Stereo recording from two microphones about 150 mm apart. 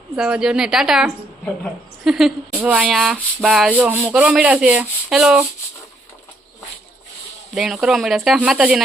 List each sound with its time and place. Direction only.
0.2 s a woman's voice: 5° right (ahead or behind)
2.6 s rub: 10° right (ahead or behind)
7.5 s speech: 5° right (ahead or behind)